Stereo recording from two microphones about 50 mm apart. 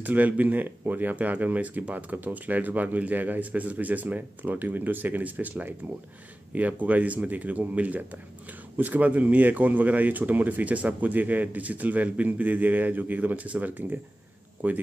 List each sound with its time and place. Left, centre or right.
0.0 s speech: right